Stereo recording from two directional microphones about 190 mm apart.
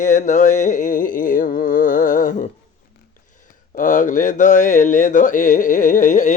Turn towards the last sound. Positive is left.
turn(degrees=45)  # may be behind; listen again after turning